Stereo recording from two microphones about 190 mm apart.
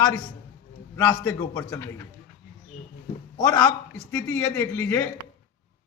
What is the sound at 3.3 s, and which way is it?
Speech, 20° left (ahead or behind).